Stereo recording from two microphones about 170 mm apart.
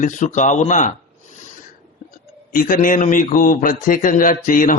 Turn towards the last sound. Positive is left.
turn(degrees=50)  # may be behind; listen again after turning